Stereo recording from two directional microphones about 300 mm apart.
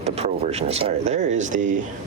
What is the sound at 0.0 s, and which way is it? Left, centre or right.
Speech, right.